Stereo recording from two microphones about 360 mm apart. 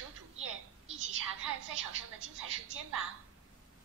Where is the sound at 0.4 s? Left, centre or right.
Right.